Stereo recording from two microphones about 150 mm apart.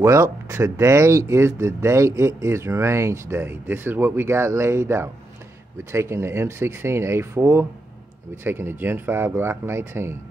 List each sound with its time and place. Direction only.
0.0 s speech: 20° right (ahead or behind)